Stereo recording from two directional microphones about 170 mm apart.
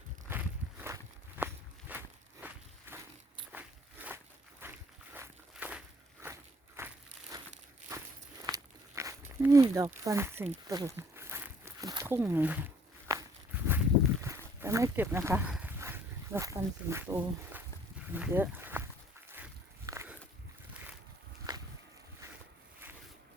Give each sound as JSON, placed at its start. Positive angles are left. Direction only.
{"t": 0.3, "sound": "walk", "side_deg": -10}
{"t": 3.5, "sound": "biting", "side_deg": -10}
{"t": 4.6, "sound": "dog", "side_deg": -15}
{"t": 5.1, "sound": "walk", "side_deg": -10}
{"t": 6.7, "sound": "crushing", "side_deg": -15}
{"t": 7.9, "sound": "walk", "side_deg": -20}
{"t": 10.0, "sound": "speech", "side_deg": -15}
{"t": 10.7, "sound": "a sound", "side_deg": -20}
{"t": 13.1, "sound": "walk", "side_deg": -15}
{"t": 14.2, "sound": "a sound", "side_deg": -15}
{"t": 15.5, "sound": "dog", "side_deg": -10}
{"t": 18.1, "sound": "speech", "side_deg": -10}
{"t": 19.3, "sound": "walk", "side_deg": -15}
{"t": 21.5, "sound": "boat", "side_deg": -25}